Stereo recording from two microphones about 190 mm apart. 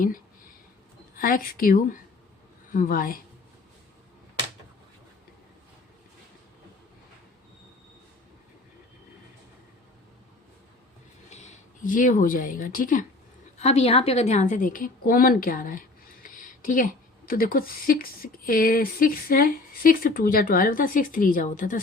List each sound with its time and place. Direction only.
1.1 s speech: 50° left (ahead or behind)
11.3 s speech: 35° left (ahead or behind)
13.6 s speech: 35° left (ahead or behind)